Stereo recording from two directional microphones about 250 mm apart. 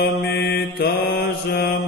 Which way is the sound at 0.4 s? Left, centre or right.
Left.